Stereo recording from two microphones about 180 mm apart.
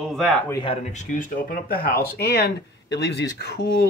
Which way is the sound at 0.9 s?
45° left (ahead or behind).